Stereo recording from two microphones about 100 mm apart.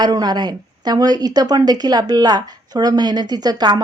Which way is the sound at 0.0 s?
45° right (ahead or behind).